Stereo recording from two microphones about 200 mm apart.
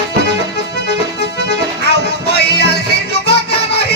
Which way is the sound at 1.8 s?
55° left (ahead or behind).